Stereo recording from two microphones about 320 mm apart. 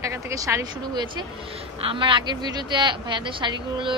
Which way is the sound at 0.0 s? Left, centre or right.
Centre.